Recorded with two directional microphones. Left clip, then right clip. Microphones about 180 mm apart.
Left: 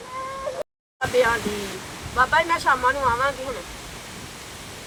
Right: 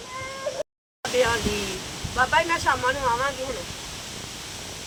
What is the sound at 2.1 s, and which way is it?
Speech, 25° right (ahead or behind).